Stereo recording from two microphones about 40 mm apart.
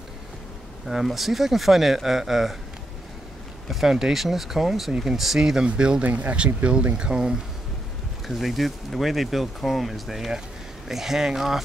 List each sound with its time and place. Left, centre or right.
0.8 s speech: centre
3.6 s speech: centre
6.0 s speech: right
6.3 s speech: right
8.3 s speech: centre